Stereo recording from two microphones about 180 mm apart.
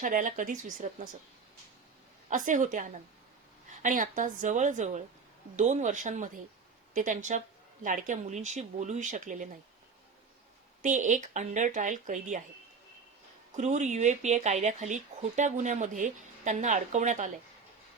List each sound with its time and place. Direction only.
0.0 s speech: 50° right (ahead or behind)
2.3 s speech: 45° right (ahead or behind)
10.8 s speech: 45° right (ahead or behind)
13.6 s speech: 40° right (ahead or behind)